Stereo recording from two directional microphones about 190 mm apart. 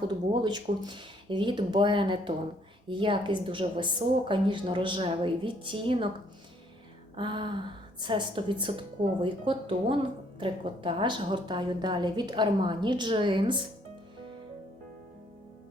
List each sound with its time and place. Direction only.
0.1 s a woman's voice: 20° right (ahead or behind)
7.2 s a woman's voice: 25° right (ahead or behind)